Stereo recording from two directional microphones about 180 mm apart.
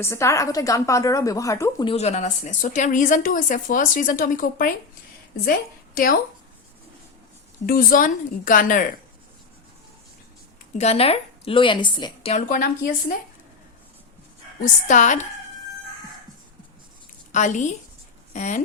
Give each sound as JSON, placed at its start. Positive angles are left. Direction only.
{"t": 0.0, "sound": "a woman's voice", "side_deg": 15}
{"t": 1.9, "sound": "a woman's voice", "side_deg": 35}
{"t": 7.7, "sound": "a woman's voice", "side_deg": 50}
{"t": 10.8, "sound": "a woman's voice", "side_deg": 35}
{"t": 12.3, "sound": "a woman's voice", "side_deg": 45}
{"t": 14.6, "sound": "a woman's voice", "side_deg": 45}
{"t": 17.3, "sound": "a woman's voice", "side_deg": 45}